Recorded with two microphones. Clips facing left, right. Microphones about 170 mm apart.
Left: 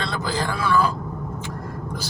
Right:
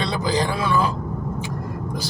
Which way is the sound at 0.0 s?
15° right (ahead or behind).